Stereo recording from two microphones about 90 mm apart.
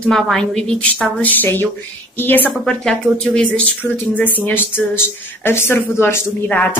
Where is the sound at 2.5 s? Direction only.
5° left (ahead or behind).